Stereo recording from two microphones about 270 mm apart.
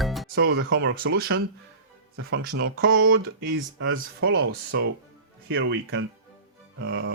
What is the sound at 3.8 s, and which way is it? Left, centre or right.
Speech, right.